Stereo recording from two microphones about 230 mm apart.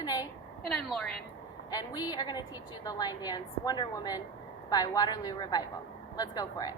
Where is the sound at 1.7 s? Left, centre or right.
Centre.